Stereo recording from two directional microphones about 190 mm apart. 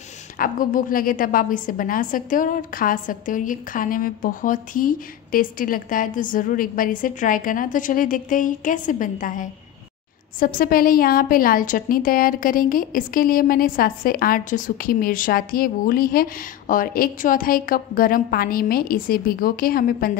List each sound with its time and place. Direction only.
0.4 s a woman's voice: 45° left (ahead or behind)